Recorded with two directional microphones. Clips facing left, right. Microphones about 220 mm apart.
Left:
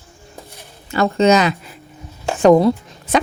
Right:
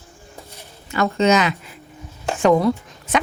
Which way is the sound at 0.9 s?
35° left (ahead or behind).